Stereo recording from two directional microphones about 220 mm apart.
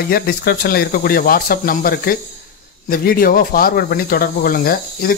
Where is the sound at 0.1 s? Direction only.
45° left (ahead or behind).